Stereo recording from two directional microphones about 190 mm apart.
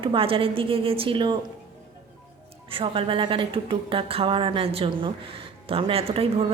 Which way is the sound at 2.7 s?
30° right (ahead or behind).